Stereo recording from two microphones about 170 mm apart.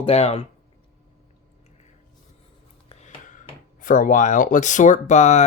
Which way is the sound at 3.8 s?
50° left (ahead or behind).